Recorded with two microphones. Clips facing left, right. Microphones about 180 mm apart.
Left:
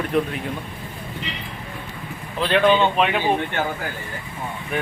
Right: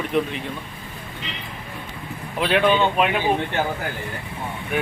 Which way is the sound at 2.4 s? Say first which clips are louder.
Left 1 dB; 10° right (ahead or behind).